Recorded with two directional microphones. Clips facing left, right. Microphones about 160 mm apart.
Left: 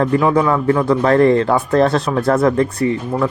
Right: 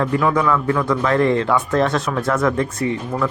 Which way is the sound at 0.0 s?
35° left (ahead or behind).